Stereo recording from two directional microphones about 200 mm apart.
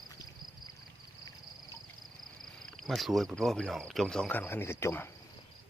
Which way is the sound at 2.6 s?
Centre (ahead or behind).